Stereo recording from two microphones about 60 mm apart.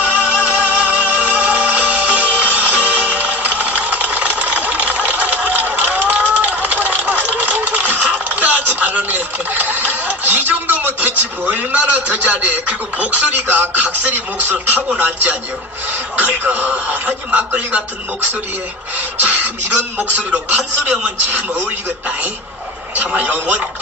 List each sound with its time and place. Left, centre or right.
0.0 s music: right
14.9 s speech: right
19.1 s speech: right
23.0 s speech: right